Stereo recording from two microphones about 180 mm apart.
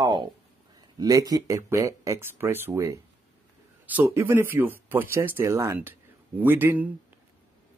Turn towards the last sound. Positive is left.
turn(degrees=-10)  # may be behind; listen again after turning